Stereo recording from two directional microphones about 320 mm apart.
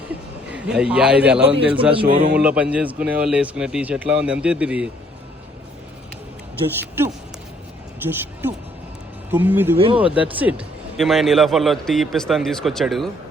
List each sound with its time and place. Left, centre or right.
0.5 s a man's voice: centre
1.9 s speech: centre
2.3 s a man's voice: centre
8.0 s speech: centre
9.7 s speech: centre
10.2 s a man's voice: centre